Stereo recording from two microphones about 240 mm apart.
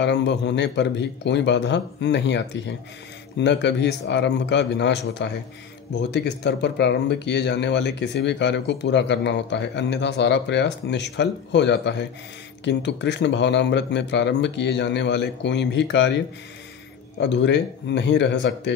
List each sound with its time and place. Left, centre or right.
0.0 s speech: left
17.2 s speech: left